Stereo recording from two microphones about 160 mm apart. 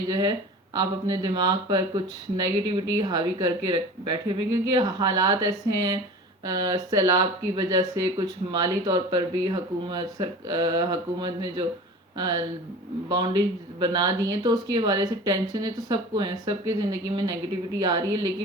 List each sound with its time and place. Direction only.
0.1 s speech: 25° right (ahead or behind)
17.7 s speech: 25° right (ahead or behind)